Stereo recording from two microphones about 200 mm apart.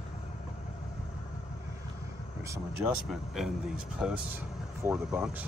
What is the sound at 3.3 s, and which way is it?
Speech, 5° right (ahead or behind).